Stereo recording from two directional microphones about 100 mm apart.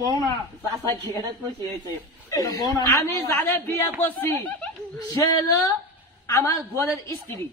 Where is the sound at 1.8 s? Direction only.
40° left (ahead or behind).